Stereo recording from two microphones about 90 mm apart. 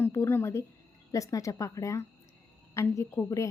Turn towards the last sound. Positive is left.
turn(degrees=35)  # may be behind; listen again after turning